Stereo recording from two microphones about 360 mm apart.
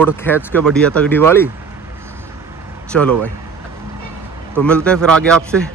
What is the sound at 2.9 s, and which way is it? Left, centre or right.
Speech, centre.